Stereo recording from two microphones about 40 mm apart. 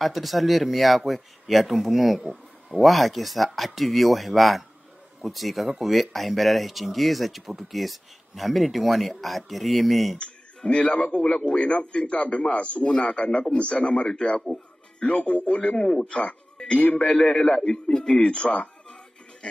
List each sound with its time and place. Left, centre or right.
0.0 s speech: centre
10.1 s speech: left
11.2 s a man's voice: left
14.5 s speech: centre
15.0 s speech: left
15.8 s a man's voice: left
16.6 s music: left
17.0 s a man's voice: left
17.9 s speech: centre
18.2 s speech: left